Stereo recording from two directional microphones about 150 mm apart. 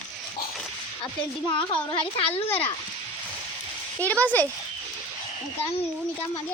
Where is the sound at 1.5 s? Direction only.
35° left (ahead or behind).